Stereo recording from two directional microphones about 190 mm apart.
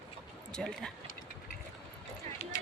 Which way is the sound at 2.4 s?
35° left (ahead or behind).